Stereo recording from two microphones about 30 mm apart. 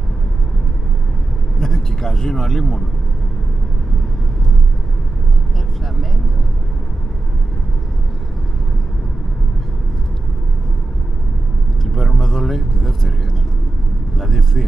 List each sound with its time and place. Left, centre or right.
1.6 s speech: centre
11.8 s vehicle: centre
14.1 s speech: centre